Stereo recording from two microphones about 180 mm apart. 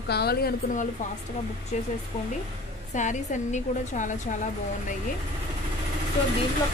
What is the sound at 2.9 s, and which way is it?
Speech, 40° left (ahead or behind).